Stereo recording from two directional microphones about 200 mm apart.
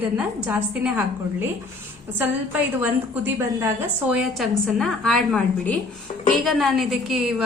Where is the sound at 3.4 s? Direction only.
10° right (ahead or behind).